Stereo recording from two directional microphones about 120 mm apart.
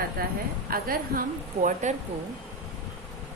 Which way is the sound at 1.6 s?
90° right.